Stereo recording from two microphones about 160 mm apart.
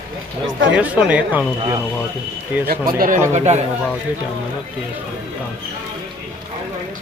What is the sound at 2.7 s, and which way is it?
Speech, 65° right (ahead or behind).